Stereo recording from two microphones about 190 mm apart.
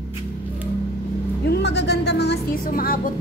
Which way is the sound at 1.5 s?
65° left (ahead or behind).